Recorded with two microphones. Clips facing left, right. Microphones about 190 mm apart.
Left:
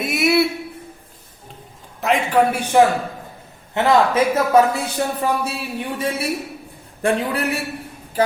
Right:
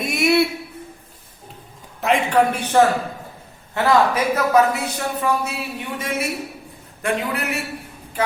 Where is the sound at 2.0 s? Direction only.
Centre (ahead or behind).